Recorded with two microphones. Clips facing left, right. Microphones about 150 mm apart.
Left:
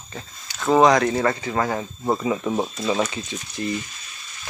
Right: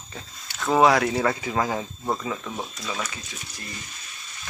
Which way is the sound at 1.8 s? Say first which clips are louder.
Left 4 dB; 10° left (ahead or behind).